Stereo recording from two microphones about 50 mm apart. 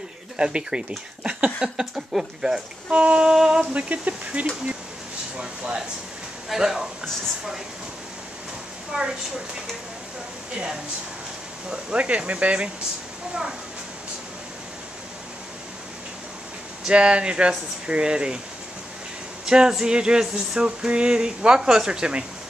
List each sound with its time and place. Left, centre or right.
0.4 s speech: centre
3.7 s speech: right
5.4 s speech: centre
8.9 s speech: centre
11.7 s speech: right
16.8 s speech: right
19.4 s speech: centre